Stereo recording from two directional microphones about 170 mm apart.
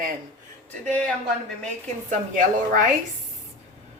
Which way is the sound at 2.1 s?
50° right (ahead or behind).